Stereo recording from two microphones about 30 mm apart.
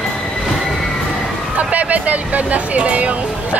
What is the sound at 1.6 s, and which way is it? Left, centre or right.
Speech, right.